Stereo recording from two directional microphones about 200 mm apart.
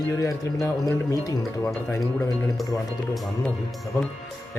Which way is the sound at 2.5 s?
Centre (ahead or behind).